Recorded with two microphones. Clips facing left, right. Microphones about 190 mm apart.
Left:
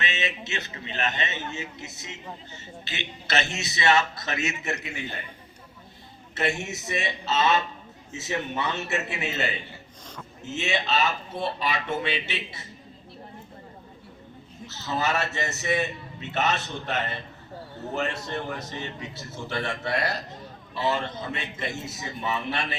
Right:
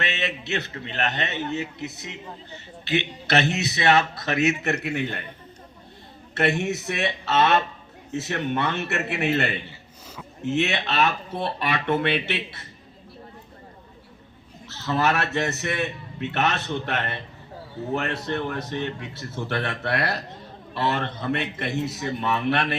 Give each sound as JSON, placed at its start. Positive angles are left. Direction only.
{"t": 0.0, "sound": "a man's voice", "side_deg": -60}
{"t": 6.3, "sound": "a man's voice", "side_deg": -60}
{"t": 14.7, "sound": "a man's voice", "side_deg": -60}